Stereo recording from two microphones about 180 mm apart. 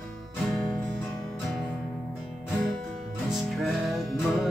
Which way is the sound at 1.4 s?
Centre (ahead or behind).